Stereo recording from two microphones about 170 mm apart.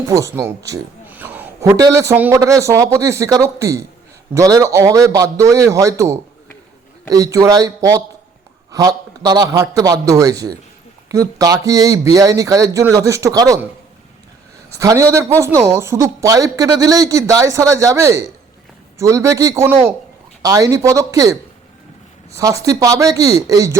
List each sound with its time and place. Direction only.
0.1 s a man's voice: 15° right (ahead or behind)
14.7 s speech: 20° right (ahead or behind)
22.4 s speech: 20° right (ahead or behind)